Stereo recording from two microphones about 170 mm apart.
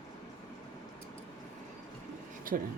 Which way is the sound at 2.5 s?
55° right (ahead or behind).